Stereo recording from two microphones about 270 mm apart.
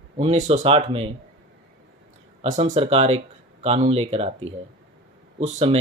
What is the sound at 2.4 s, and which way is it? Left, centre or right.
Speech, right.